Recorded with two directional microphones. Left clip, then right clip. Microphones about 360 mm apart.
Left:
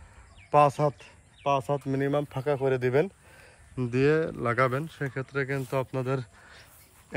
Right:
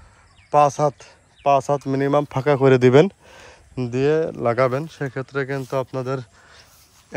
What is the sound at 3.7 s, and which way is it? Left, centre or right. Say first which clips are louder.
Speech: right 5 dB; centre.